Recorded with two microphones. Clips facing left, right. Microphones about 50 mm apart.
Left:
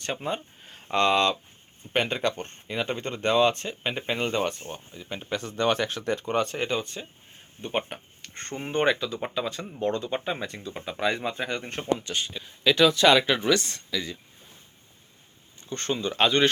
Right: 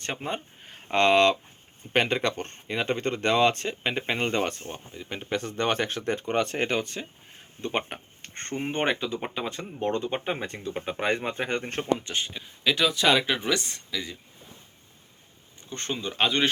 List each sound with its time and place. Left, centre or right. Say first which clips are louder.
0.0 s speech: left 2 dB; right
0.6 s a sound: right 1 dB; right
1.9 s speech: right 1 dB; right
8.2 s a sound: right 3 dB; right
8.6 s speech: left 3 dB; right
11.9 s speech: even; right
12.6 s speech: left 4 dB; centre
15.7 s speech: left 4 dB; centre